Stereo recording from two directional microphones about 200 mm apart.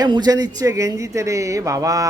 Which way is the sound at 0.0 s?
20° right (ahead or behind).